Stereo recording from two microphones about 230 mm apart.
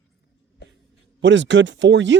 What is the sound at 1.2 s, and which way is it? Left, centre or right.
Speech, right.